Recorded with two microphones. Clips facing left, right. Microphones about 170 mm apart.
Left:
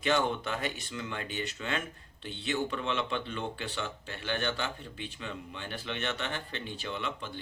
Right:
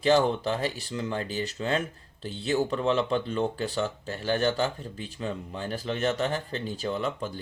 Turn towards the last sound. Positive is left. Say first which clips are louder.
# right 7 dB
turn(degrees=-40)  # may be behind; listen again after turning